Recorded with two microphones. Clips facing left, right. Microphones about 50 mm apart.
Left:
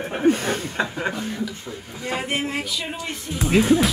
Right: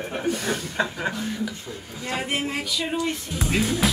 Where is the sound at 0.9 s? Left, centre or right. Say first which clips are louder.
Left 2 dB; centre.